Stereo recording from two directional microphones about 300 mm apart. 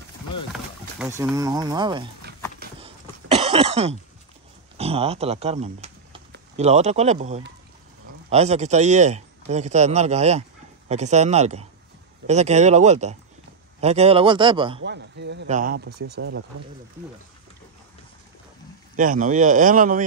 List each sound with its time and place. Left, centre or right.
0.5 s speech: centre
2.8 s cough: centre
4.7 s a man's voice: centre
14.8 s a man's voice: right
15.4 s a man's voice: right
18.9 s a man's voice: right